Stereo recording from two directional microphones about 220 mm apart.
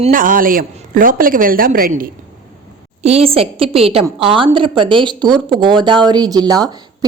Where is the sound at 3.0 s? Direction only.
30° right (ahead or behind).